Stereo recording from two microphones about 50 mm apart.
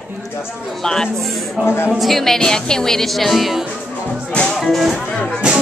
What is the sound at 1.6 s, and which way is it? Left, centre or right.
Speech, left.